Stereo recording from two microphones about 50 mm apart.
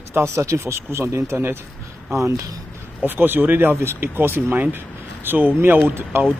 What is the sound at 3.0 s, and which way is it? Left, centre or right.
Speech, right.